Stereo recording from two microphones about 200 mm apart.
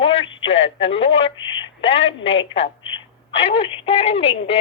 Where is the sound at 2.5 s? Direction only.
25° left (ahead or behind).